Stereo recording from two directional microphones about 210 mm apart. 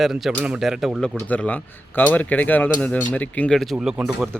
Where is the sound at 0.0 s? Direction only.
Centre (ahead or behind).